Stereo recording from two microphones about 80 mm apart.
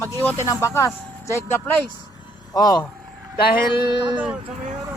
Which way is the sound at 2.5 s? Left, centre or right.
Left.